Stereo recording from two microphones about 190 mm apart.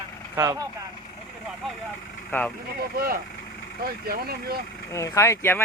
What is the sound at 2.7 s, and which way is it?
Speech, 50° right (ahead or behind).